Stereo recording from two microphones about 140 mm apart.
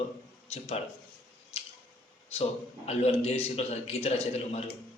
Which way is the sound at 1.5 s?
45° left (ahead or behind).